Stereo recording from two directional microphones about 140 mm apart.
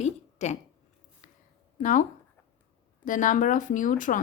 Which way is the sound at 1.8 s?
65° left (ahead or behind).